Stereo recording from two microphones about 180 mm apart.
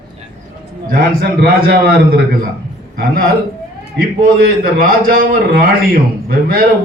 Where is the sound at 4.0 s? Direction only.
55° right (ahead or behind).